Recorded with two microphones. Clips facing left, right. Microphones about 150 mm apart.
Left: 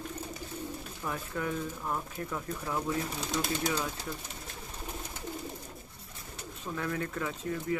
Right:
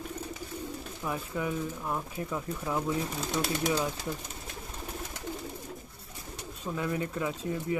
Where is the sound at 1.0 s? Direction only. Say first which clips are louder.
Right 2 dB; 15° right (ahead or behind).